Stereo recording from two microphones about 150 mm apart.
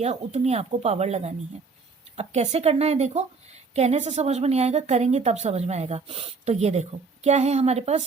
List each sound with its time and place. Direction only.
0.0 s a woman's voice: 45° right (ahead or behind)